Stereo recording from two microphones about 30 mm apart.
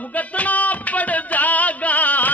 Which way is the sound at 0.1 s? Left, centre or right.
Left.